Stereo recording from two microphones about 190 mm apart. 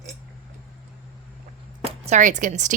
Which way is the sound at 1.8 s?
40° right (ahead or behind).